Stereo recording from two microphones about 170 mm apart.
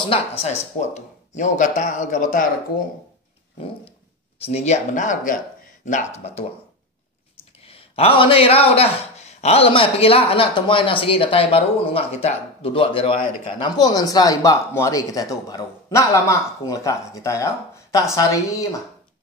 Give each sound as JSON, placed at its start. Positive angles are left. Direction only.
{"t": 0.0, "sound": "a man's voice", "side_deg": 35}
{"t": 4.4, "sound": "a man's voice", "side_deg": 35}
{"t": 7.6, "sound": "a man's voice", "side_deg": 35}